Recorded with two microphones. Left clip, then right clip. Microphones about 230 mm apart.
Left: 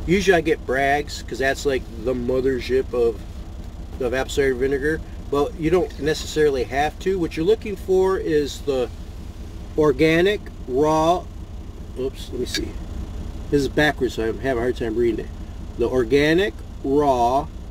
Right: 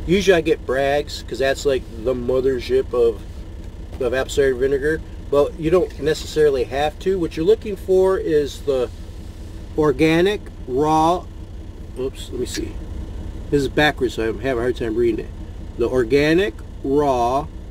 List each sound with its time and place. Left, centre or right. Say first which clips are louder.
0.1 s speech: right 2 dB; centre
13.5 s speech: right 2 dB; centre